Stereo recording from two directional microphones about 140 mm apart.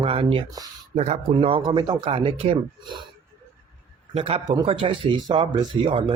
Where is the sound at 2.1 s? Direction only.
40° right (ahead or behind).